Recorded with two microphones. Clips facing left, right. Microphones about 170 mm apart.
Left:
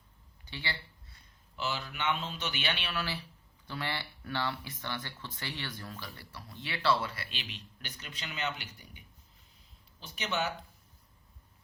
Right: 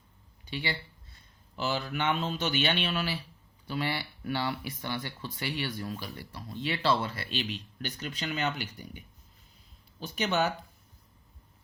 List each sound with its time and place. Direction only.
0.4 s speech: 15° right (ahead or behind)
1.5 s speech: 40° right (ahead or behind)
10.0 s speech: 45° right (ahead or behind)